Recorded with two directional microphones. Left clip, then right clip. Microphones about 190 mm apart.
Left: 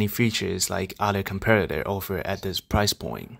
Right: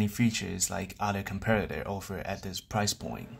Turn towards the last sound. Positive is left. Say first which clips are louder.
# left 7 dB
turn(degrees=40)  # may be behind; listen again after turning